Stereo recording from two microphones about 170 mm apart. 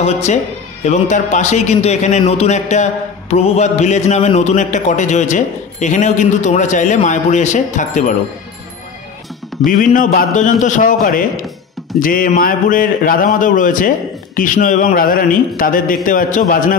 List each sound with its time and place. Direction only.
0.0 s a man's voice: 40° left (ahead or behind)
9.7 s a man's voice: 55° left (ahead or behind)